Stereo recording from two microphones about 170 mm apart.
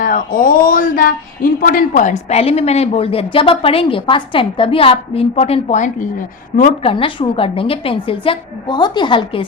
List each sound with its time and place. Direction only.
0.0 s speech: 55° left (ahead or behind)
6.8 s speech: 30° left (ahead or behind)